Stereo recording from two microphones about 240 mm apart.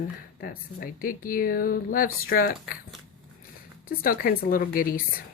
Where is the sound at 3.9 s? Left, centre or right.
Left.